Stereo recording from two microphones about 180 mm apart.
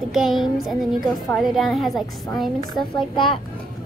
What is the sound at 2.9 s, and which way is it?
Speech, 25° left (ahead or behind).